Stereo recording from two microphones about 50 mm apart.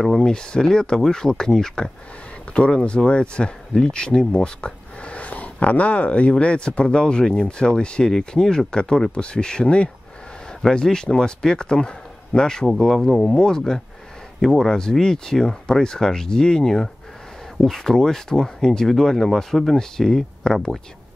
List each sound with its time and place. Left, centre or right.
0.2 s speech: centre
2.5 s speech: left